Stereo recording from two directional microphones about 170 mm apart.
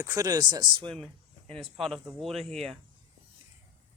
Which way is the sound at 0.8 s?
5° left (ahead or behind).